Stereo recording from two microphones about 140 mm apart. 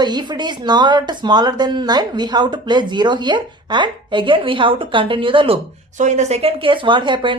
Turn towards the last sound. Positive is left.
turn(degrees=-35)  # may be behind; listen again after turning